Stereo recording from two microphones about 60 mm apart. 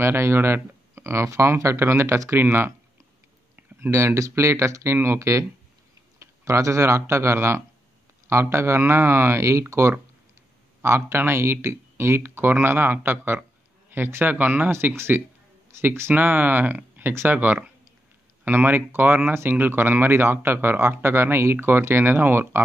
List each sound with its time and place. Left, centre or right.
0.0 s speech: right
3.9 s speech: right
15.0 s speech: right